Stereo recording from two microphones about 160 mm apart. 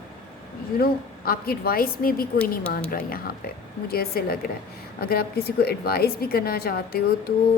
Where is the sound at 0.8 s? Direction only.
70° left (ahead or behind).